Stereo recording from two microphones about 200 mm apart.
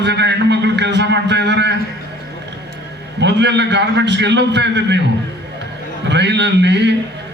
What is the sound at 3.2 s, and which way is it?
A man's voice, 60° right (ahead or behind).